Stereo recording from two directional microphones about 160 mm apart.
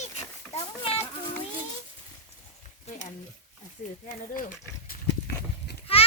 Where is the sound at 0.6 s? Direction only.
40° left (ahead or behind).